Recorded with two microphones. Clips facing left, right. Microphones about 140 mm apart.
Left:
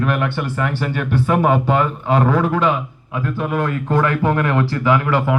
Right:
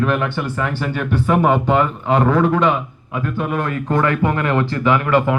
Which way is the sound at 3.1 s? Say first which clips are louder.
Even; 20° right (ahead or behind).